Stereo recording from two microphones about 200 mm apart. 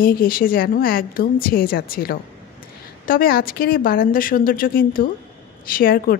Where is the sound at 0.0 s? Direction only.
45° left (ahead or behind).